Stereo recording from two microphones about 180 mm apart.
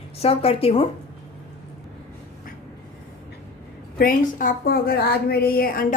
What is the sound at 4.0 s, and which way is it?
A woman's voice, 50° left (ahead or behind).